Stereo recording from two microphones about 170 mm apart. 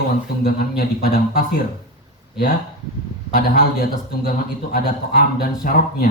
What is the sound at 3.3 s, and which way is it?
Speech, 60° left (ahead or behind).